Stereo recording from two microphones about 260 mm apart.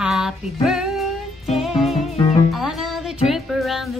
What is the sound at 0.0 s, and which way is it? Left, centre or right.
Female singing, centre.